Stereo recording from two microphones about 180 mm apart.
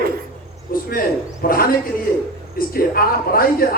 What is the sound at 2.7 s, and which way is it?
A man's voice, 55° left (ahead or behind).